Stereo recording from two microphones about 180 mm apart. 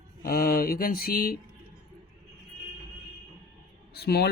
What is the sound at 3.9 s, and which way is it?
Speech, 60° left (ahead or behind).